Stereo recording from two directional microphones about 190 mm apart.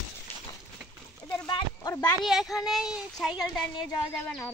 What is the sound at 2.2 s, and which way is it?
Speech, centre (ahead or behind).